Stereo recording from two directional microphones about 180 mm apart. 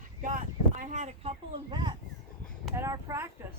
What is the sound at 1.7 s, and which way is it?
Speech, 25° right (ahead or behind).